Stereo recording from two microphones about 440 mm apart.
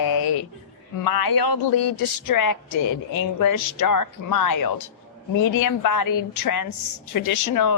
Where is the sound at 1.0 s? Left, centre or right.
Left.